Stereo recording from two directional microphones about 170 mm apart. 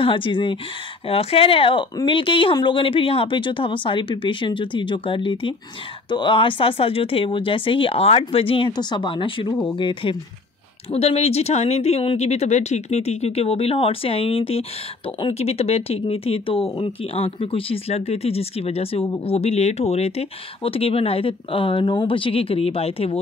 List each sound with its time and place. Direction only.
0.0 s speech: 30° left (ahead or behind)